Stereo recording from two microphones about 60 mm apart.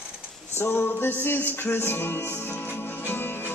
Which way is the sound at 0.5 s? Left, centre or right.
Left.